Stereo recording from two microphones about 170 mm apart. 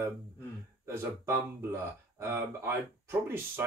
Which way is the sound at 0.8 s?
15° right (ahead or behind).